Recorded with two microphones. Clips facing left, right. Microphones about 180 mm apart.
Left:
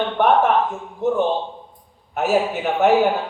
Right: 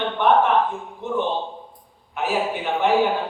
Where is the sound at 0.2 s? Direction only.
45° left (ahead or behind).